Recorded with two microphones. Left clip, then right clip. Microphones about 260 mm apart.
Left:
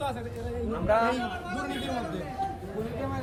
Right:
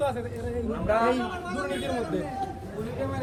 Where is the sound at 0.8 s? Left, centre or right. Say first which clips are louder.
Even; left.